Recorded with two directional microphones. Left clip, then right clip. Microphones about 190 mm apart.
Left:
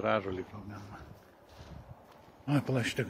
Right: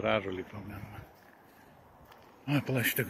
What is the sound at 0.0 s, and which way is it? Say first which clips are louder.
Speech: even; 15° right (ahead or behind).